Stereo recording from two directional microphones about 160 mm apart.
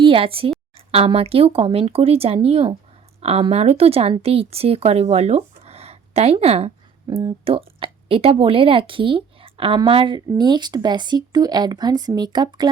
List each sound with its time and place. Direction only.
0.0 s speech: 35° right (ahead or behind)
7.1 s a woman's voice: 25° right (ahead or behind)